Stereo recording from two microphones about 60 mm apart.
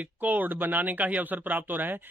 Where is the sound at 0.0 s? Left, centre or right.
Right.